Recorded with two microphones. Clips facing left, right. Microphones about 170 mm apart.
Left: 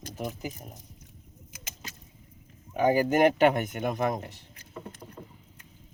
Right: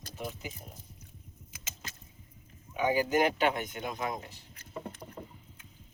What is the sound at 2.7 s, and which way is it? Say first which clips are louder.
Speech: left 4 dB; 50° left (ahead or behind).